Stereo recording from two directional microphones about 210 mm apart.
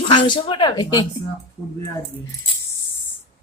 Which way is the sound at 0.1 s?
20° left (ahead or behind).